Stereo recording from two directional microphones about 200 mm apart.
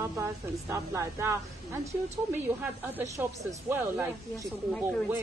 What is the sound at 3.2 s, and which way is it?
Speech, 10° right (ahead or behind).